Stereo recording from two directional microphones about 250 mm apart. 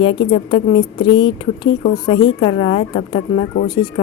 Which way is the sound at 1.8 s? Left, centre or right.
Left.